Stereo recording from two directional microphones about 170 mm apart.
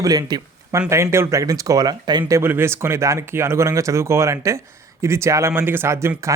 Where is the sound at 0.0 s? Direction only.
20° right (ahead or behind).